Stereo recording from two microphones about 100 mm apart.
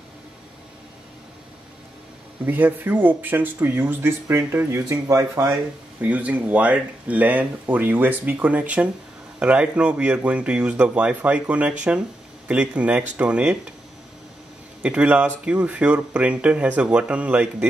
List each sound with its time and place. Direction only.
2.4 s speech: 20° right (ahead or behind)
4.7 s speech: 35° right (ahead or behind)
5.9 s speech: 15° right (ahead or behind)
14.8 s speech: 10° right (ahead or behind)